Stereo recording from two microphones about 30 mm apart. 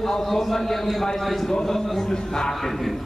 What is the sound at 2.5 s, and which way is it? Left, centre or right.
Speech, centre.